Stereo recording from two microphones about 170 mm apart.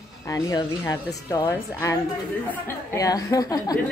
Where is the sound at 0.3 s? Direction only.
20° left (ahead or behind).